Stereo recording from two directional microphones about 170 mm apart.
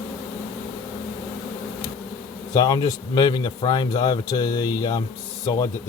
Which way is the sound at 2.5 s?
20° left (ahead or behind).